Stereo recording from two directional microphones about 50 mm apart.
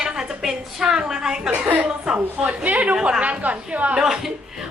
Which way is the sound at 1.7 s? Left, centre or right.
Right.